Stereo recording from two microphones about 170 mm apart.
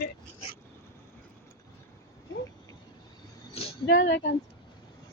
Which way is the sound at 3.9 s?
80° left.